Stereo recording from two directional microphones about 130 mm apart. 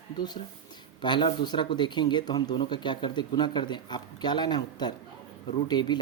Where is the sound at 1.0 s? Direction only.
35° left (ahead or behind).